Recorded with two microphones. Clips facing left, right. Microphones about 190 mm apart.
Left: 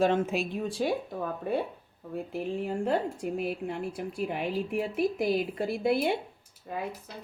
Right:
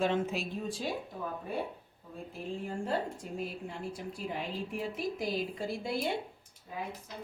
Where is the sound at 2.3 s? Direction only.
70° left (ahead or behind).